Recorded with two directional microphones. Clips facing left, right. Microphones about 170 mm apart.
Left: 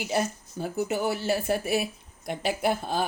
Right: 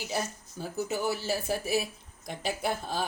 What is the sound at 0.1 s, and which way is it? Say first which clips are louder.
Speech: left 7 dB; 60° left (ahead or behind).